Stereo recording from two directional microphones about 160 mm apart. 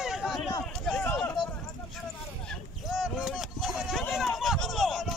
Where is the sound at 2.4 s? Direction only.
Centre (ahead or behind).